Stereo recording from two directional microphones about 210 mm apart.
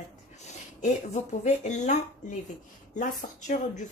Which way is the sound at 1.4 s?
35° left (ahead or behind).